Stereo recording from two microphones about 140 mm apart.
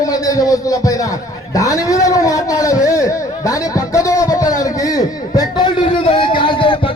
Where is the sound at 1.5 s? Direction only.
25° left (ahead or behind).